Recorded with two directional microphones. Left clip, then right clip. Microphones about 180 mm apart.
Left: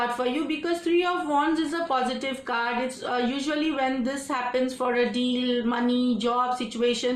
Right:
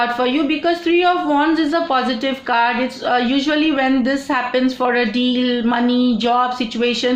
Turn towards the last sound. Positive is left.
turn(degrees=-35)  # may be behind; listen again after turning